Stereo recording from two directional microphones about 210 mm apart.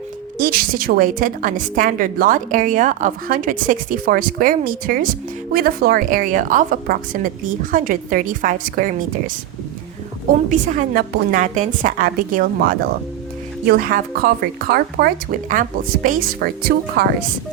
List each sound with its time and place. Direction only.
0.3 s a woman's voice: 45° right (ahead or behind)
10.5 s a woman's voice: 35° right (ahead or behind)